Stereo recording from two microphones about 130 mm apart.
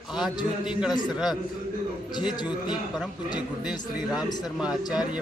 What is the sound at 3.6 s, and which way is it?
Speech, 5° right (ahead or behind).